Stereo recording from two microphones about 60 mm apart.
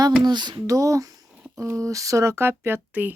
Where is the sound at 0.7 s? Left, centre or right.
Right.